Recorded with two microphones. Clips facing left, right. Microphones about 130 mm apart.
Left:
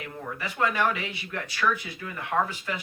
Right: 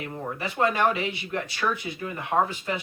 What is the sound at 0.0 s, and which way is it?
Speech, 30° right (ahead or behind).